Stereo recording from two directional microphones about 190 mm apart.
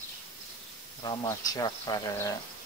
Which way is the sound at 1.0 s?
20° left (ahead or behind).